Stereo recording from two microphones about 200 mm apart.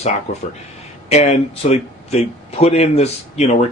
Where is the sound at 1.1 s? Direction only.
35° left (ahead or behind).